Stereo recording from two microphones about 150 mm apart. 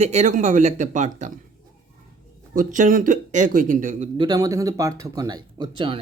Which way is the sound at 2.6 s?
65° right (ahead or behind).